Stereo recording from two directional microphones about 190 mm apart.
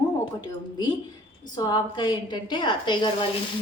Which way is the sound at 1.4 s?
20° left (ahead or behind).